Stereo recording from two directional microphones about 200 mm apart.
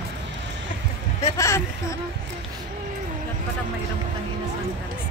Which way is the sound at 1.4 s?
15° left (ahead or behind).